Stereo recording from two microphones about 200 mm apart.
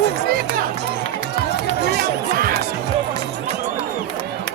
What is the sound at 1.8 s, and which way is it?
Music, 55° right (ahead or behind).